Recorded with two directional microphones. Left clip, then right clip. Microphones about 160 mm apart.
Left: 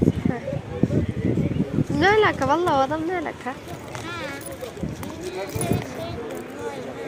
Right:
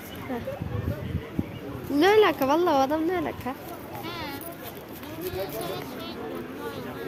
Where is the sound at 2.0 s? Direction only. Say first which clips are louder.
Left 1 dB; 35° right (ahead or behind).